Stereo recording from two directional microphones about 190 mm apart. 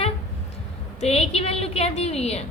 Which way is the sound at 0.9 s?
35° left (ahead or behind).